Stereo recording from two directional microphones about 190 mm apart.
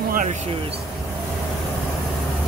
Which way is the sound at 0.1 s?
40° right (ahead or behind).